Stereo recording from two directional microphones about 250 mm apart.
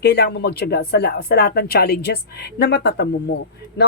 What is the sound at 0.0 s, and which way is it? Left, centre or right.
Speech, left.